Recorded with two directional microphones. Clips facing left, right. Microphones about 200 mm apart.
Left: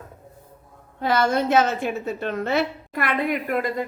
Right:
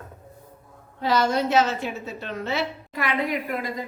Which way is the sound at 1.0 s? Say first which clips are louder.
Left 1 dB; 55° left (ahead or behind).